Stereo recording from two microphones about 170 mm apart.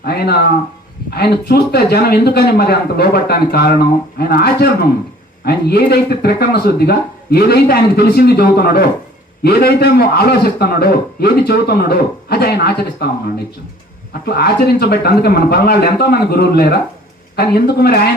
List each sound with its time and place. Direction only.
0.0 s a man's voice: 65° left (ahead or behind)